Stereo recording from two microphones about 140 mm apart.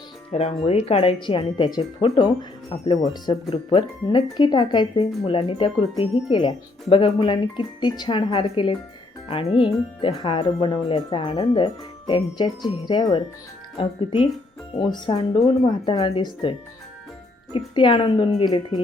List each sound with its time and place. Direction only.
0.3 s speech: 45° left (ahead or behind)
17.7 s speech: 35° left (ahead or behind)